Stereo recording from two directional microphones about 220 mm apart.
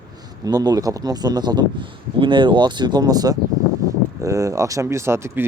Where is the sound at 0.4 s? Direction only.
15° right (ahead or behind).